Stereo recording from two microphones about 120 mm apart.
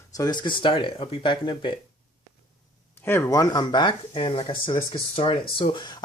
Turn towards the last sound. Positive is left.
turn(degrees=40)  # may be behind; listen again after turning